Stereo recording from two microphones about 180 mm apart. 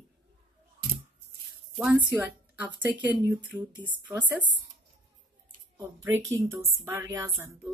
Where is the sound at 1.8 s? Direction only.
10° right (ahead or behind).